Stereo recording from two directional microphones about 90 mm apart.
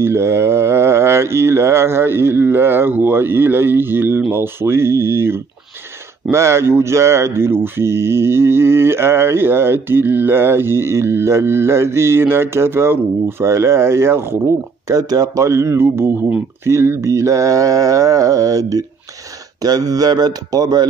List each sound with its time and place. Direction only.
0.0 s speech: 30° right (ahead or behind)
14.9 s speech: 45° right (ahead or behind)
19.6 s mantra: 45° right (ahead or behind)